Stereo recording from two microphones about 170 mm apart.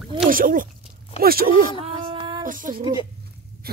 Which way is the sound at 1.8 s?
30° right (ahead or behind).